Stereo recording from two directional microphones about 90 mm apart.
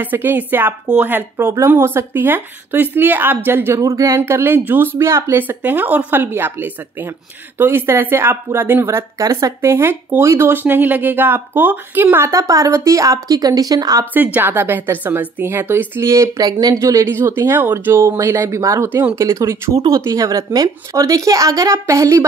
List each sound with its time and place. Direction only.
0.0 s a woman's voice: 20° right (ahead or behind)
3.8 s speech: 40° right (ahead or behind)
4.2 s a woman's voice: 25° right (ahead or behind)
9.2 s speech: 40° right (ahead or behind)
14.1 s a woman's voice: 20° right (ahead or behind)
16.1 s speech: 40° right (ahead or behind)